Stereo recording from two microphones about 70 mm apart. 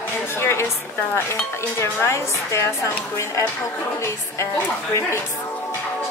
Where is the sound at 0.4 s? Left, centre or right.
Left.